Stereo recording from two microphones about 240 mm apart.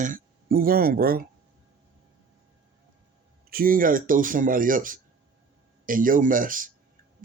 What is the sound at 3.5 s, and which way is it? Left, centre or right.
Speech, right.